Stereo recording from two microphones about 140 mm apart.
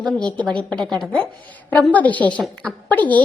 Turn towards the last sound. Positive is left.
turn(degrees=10)  # may be behind; listen again after turning